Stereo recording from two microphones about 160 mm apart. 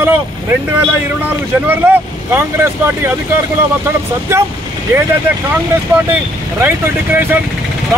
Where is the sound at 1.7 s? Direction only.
15° right (ahead or behind).